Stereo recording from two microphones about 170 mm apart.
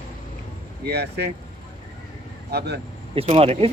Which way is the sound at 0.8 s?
75° right (ahead or behind).